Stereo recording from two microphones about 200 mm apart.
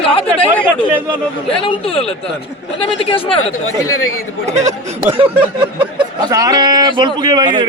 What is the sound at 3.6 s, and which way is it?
Speech, 90° left.